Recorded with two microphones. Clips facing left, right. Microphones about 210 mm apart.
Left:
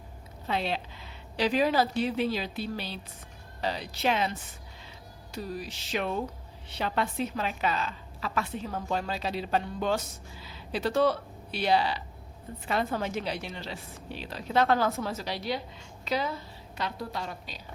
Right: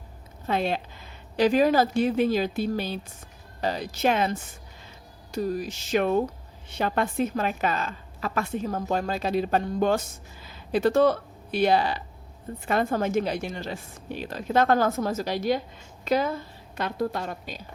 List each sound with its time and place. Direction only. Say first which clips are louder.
0.4 s a woman's voice: right 5 dB; 50° right (ahead or behind)